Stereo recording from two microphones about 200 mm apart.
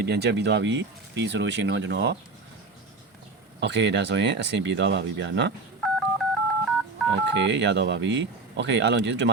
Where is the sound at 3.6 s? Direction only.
60° right (ahead or behind).